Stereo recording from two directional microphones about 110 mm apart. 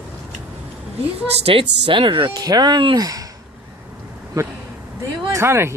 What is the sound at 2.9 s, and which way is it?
Speech, 35° right (ahead or behind).